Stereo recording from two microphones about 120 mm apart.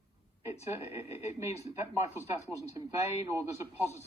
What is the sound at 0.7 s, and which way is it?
Speech, 25° right (ahead or behind).